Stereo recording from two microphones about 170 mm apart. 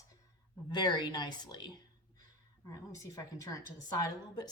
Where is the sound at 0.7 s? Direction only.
25° left (ahead or behind).